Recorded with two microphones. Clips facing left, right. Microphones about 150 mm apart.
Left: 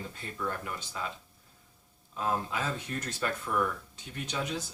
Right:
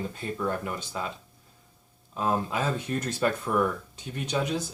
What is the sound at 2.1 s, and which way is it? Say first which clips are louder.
Speech: right 4 dB; 25° right (ahead or behind).